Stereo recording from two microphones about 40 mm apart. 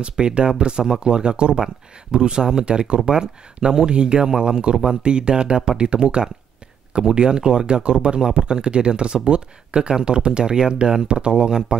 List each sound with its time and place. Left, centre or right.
0.0 s speech: right